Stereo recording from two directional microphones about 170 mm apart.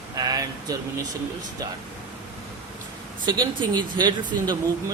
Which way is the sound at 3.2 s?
25° right (ahead or behind).